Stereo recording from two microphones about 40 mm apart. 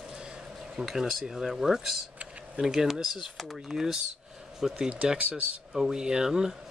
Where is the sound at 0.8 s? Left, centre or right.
Centre.